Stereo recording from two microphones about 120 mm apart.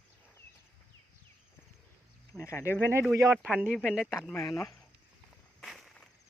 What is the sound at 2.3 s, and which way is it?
Speech, 25° left (ahead or behind).